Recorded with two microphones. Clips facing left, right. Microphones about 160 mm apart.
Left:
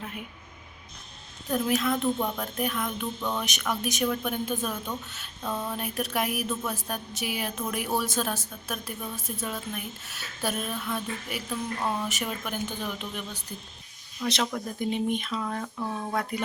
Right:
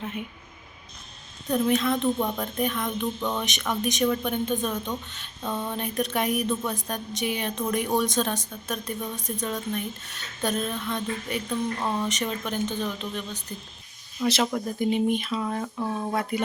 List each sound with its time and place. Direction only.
1.5 s speech: 5° left (ahead or behind)
14.2 s speech: 15° right (ahead or behind)
14.8 s speech: centre (ahead or behind)
15.4 s speech: 15° right (ahead or behind)